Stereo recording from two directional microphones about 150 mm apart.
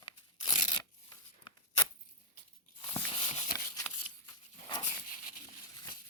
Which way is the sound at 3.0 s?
50° left (ahead or behind).